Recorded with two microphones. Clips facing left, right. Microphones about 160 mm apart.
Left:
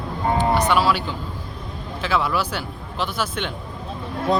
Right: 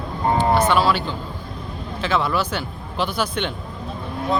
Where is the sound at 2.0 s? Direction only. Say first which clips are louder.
Right 1 dB; 5° left (ahead or behind).